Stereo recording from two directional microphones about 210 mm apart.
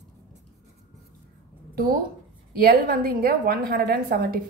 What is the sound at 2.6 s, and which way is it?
A woman's voice, 45° right (ahead or behind).